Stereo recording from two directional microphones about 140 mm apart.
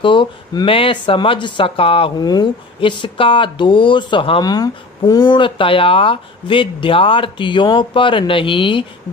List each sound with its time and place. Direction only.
0.0 s speech: 35° left (ahead or behind)
2.1 s speech: 30° left (ahead or behind)